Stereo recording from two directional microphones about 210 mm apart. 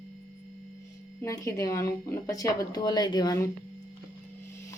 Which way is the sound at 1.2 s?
15° left (ahead or behind).